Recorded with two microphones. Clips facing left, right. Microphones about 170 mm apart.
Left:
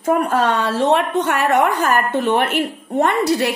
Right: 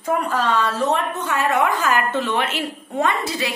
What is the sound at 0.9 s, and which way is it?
A woman's voice, 80° left.